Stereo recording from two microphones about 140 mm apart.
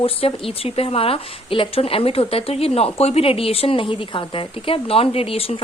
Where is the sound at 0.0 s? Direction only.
40° left (ahead or behind).